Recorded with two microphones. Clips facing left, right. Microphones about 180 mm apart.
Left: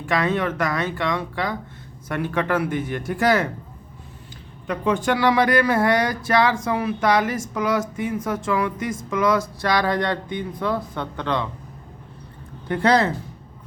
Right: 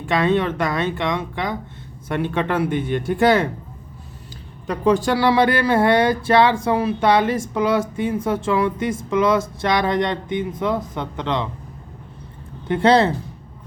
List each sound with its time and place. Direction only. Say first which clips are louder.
0.0 s speech: right 3 dB; 25° right (ahead or behind)
4.6 s speech: right 4 dB; 35° right (ahead or behind); by 11.4 s 20° right (ahead or behind)
12.6 s speech: right 3 dB; 25° right (ahead or behind)